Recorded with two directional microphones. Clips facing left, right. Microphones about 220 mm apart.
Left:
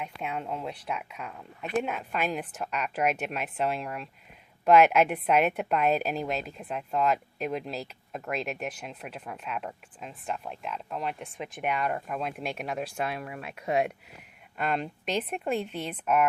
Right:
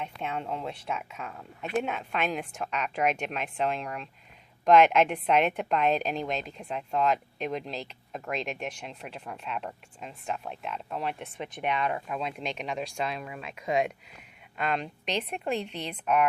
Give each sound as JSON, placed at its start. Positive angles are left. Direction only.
{"t": 0.0, "sound": "a woman's voice", "side_deg": 5}